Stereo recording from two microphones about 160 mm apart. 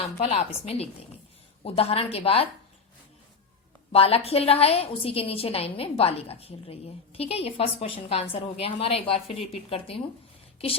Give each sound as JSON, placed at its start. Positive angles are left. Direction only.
{"t": 0.3, "sound": "a woman's voice", "side_deg": 40}
{"t": 3.9, "sound": "a woman's voice", "side_deg": 40}